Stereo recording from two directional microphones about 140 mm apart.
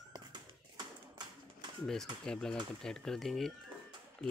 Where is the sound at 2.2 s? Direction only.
5° left (ahead or behind).